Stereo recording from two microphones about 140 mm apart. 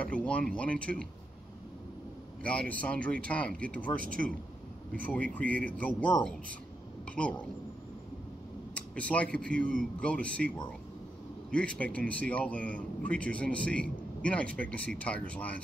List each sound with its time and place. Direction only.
0.0 s a man's voice: 10° left (ahead or behind)
2.7 s a man's voice: 10° left (ahead or behind)
4.0 s speech: 80° right
5.0 s a man's voice: 10° left (ahead or behind)
8.7 s a man's voice: 10° left (ahead or behind)